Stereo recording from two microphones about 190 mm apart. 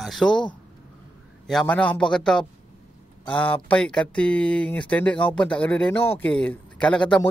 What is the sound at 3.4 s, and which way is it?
Speech, 5° left (ahead or behind).